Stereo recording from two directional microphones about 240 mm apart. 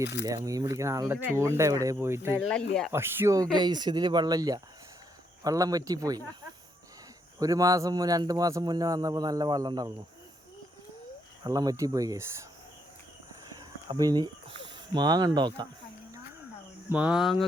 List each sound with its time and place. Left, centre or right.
0.0 s speech: left
0.4 s a man's voice: centre
2.4 s speech: centre
2.9 s a man's voice: centre
7.3 s a man's voice: centre
11.4 s a man's voice: centre
13.6 s a sound: centre
14.9 s a man's voice: centre
16.9 s speech: centre